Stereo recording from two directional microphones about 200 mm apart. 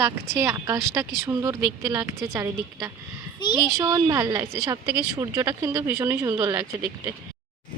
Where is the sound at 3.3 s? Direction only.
20° left (ahead or behind).